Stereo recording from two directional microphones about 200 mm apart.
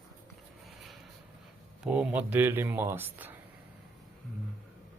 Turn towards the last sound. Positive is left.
turn(degrees=-10)  # may be behind; listen again after turning